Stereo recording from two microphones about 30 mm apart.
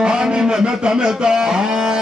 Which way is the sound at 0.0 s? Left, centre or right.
Right.